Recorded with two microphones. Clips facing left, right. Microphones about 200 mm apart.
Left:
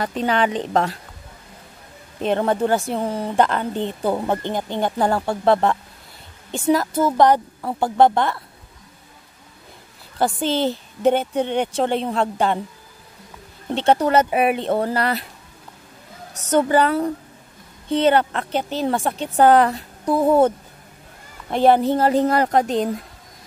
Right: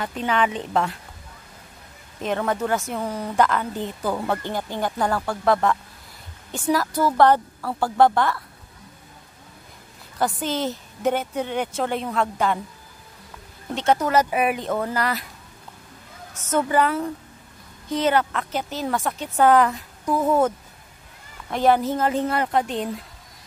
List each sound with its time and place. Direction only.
0.0 s speech: 35° left (ahead or behind)
2.2 s speech: 30° left (ahead or behind)
10.1 s speech: 30° left (ahead or behind)
13.7 s speech: 30° left (ahead or behind)
16.3 s speech: 35° left (ahead or behind)